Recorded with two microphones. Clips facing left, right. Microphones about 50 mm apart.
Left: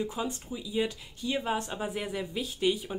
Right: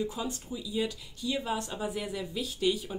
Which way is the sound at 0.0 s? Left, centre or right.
Left.